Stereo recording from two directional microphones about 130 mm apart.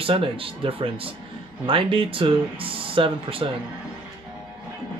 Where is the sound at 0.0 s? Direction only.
45° right (ahead or behind).